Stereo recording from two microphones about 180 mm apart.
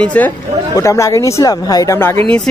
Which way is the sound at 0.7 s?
20° left (ahead or behind).